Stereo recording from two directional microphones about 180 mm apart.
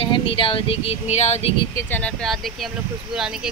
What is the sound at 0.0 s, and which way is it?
Speech, 30° left (ahead or behind).